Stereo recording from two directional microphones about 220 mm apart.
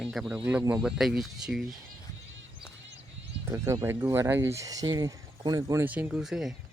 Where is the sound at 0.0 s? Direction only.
Centre (ahead or behind).